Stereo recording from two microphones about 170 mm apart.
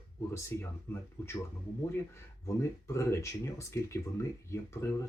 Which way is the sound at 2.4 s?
15° left (ahead or behind).